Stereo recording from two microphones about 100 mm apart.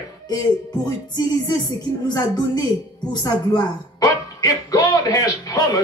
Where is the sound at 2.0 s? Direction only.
45° left (ahead or behind).